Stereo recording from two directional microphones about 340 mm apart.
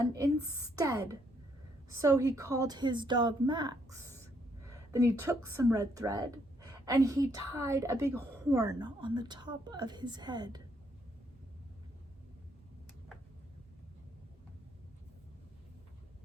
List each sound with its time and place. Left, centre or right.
0.0 s a woman's voice: centre